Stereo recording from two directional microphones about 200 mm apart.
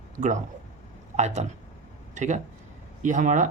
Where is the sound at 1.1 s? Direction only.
35° right (ahead or behind).